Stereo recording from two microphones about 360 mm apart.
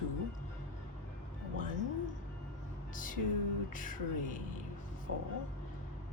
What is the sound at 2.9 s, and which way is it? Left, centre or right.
Music, left.